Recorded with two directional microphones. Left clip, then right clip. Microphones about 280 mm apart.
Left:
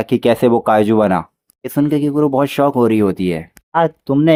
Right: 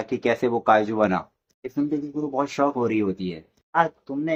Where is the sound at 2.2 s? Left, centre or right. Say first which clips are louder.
Left 7 dB; left.